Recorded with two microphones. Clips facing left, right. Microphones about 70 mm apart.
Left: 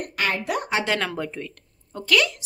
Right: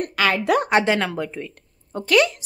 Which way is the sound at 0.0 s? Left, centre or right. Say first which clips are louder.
Right 5 dB; right.